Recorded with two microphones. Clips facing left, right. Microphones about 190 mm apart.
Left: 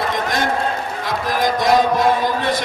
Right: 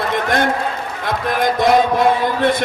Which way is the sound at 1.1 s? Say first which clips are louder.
Right 2 dB; 55° right (ahead or behind).